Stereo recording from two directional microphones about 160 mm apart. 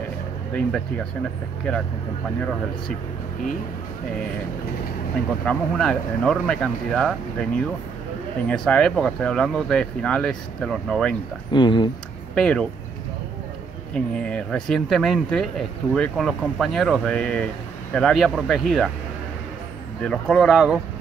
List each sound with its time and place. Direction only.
0.6 s speech: 5° left (ahead or behind)
5.4 s speech: 5° left (ahead or behind)
8.6 s speech: 5° left (ahead or behind)
11.5 s speech: 30° left (ahead or behind)
12.4 s speech: 5° left (ahead or behind)
13.9 s speech: 5° left (ahead or behind)
20.0 s speech: 5° left (ahead or behind)